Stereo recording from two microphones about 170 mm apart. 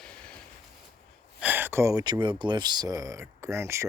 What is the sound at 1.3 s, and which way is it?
Speech, 10° right (ahead or behind).